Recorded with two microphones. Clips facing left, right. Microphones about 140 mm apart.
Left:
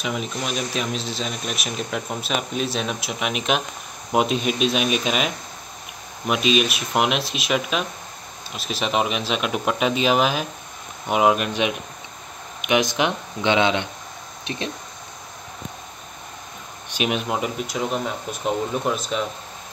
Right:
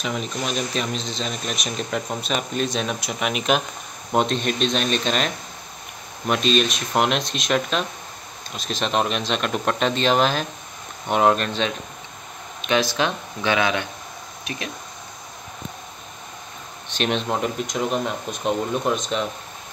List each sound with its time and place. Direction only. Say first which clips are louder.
0.0 s speech: even; 5° left (ahead or behind); by 14.7 s 25° left (ahead or behind)
16.9 s speech: even; 10° left (ahead or behind)